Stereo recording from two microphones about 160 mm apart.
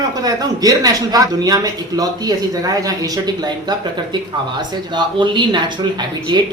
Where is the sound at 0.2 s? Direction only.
25° right (ahead or behind).